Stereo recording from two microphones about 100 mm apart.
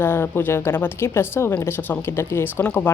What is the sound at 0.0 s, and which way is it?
Speech, 25° left (ahead or behind).